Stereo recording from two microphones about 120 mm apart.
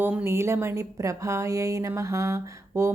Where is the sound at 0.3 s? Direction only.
20° right (ahead or behind).